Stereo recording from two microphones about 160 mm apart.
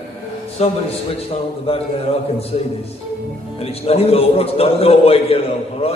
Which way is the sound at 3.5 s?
40° left (ahead or behind).